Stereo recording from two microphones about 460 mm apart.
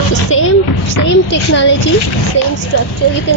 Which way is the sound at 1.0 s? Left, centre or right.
Left.